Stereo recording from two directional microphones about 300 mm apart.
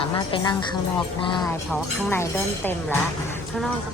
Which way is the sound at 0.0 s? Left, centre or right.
Centre.